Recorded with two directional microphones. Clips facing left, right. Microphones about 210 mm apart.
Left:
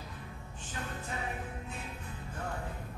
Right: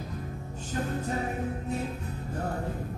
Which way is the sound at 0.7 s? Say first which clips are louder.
Right 10 dB; 40° right (ahead or behind).